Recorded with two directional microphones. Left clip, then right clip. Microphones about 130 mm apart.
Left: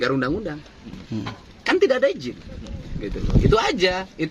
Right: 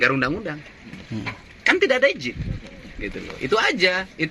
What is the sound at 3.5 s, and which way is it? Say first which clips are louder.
Speech: right 1 dB; 10° right (ahead or behind).